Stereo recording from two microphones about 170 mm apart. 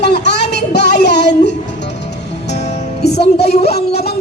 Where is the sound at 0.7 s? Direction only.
80° left.